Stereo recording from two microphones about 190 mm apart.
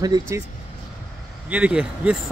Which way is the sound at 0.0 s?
20° right (ahead or behind).